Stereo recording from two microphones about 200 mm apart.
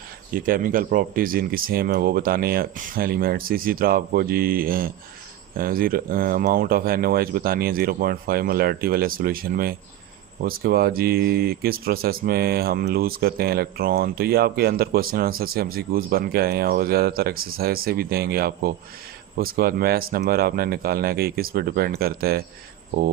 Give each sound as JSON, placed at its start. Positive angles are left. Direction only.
{"t": 0.3, "sound": "speech", "side_deg": -45}